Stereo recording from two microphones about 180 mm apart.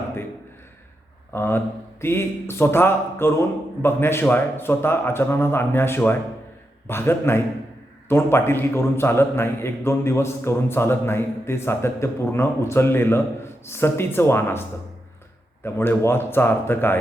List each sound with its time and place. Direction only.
1.3 s a man's voice: 10° left (ahead or behind)
15.6 s a man's voice: 10° left (ahead or behind)